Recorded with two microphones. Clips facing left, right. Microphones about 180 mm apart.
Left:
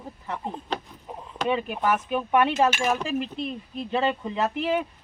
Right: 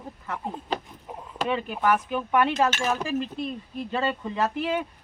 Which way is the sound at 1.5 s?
20° left (ahead or behind).